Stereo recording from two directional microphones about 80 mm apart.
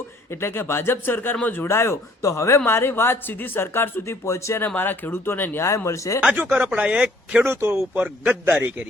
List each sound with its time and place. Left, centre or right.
0.3 s speech: left
1.6 s speech: left
4.7 s speech: left
6.3 s speech: right
7.4 s a man's voice: right
7.9 s a man's voice: centre